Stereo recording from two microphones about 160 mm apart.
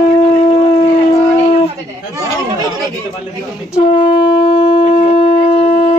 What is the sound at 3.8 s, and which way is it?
Shofar, 35° left (ahead or behind).